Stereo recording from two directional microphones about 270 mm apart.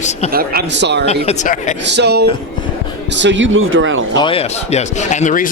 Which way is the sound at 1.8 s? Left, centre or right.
Right.